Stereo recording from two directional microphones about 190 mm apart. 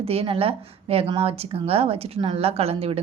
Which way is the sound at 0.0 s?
30° right (ahead or behind).